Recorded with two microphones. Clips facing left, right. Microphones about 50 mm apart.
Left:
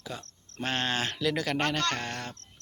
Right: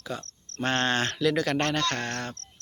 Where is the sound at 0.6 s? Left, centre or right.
Centre.